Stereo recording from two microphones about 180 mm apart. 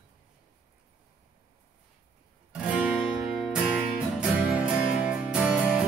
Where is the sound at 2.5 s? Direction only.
5° right (ahead or behind).